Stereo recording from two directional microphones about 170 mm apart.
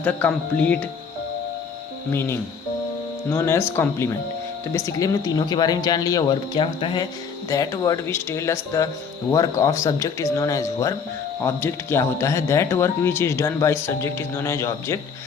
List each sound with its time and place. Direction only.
0.0 s speech: 10° left (ahead or behind)
2.1 s speech: 15° left (ahead or behind)